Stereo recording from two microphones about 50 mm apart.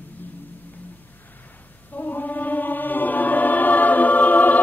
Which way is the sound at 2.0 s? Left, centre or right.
Left.